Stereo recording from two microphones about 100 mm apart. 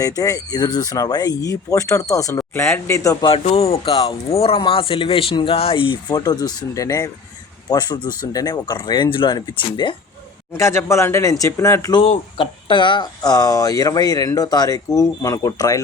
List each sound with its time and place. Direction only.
0.0 s speech: 35° left (ahead or behind)
2.5 s speech: 20° left (ahead or behind)
3.2 s speech: 80° left; by 5.5 s 60° left (ahead or behind)
5.5 s speech: 75° left (ahead or behind)
5.9 s speech: 45° left (ahead or behind)
7.7 s speech: 45° left (ahead or behind)
9.0 s speech: 55° left (ahead or behind)
10.5 s speech: 30° left (ahead or behind)
11.9 s speech: 55° left (ahead or behind); by 15.8 s 35° left (ahead or behind)